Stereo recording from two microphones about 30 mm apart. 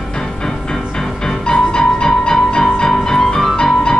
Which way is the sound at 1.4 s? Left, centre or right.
Left.